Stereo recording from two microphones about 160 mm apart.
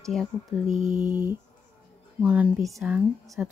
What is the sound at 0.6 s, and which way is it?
Mantra, 50° right (ahead or behind).